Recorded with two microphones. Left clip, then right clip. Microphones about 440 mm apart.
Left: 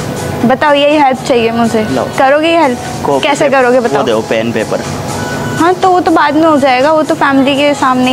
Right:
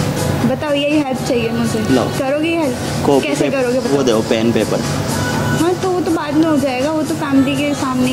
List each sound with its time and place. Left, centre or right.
0.7 s a woman's voice: left
2.2 s a woman's voice: left
4.0 s speech: centre
6.1 s a woman's voice: left